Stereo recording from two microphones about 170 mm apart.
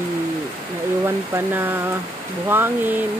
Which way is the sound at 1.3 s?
10° right (ahead or behind).